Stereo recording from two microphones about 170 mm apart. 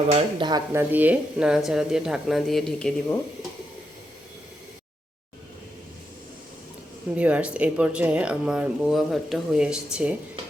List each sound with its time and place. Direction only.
0.1 s speech: 30° right (ahead or behind)
0.7 s speech: 10° right (ahead or behind); by 3.2 s 5° left (ahead or behind)
7.2 s speech: 5° right (ahead or behind)